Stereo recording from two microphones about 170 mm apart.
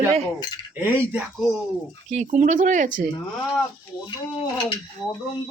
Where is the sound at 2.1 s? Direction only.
45° right (ahead or behind).